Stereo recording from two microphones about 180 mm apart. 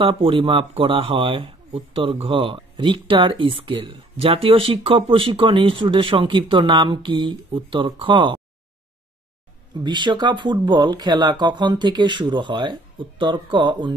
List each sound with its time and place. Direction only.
0.2 s speech: 30° right (ahead or behind)
9.8 s speech: 25° right (ahead or behind)